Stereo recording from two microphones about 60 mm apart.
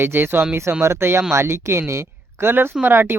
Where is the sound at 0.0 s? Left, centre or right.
Right.